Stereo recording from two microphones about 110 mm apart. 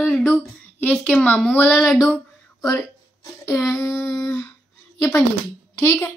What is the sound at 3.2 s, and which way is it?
A woman's voice, 25° left (ahead or behind).